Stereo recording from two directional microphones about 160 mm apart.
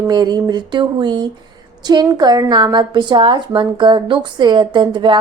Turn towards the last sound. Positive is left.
turn(degrees=-30)  # may be behind; listen again after turning